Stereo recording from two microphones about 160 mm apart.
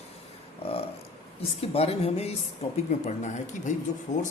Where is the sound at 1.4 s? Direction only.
40° left (ahead or behind).